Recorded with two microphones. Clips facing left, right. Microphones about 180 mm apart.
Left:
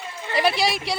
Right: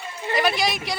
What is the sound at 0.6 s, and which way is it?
Speech, 30° left (ahead or behind).